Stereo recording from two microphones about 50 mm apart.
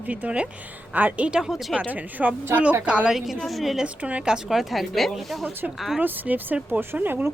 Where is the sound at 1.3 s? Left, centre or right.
Centre.